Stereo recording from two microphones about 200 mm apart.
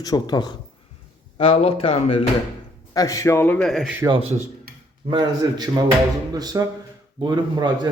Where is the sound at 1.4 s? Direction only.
30° left (ahead or behind).